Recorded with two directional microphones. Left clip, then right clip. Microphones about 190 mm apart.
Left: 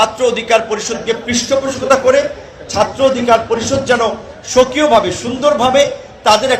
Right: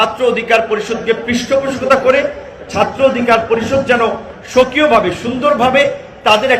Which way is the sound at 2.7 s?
30° left (ahead or behind).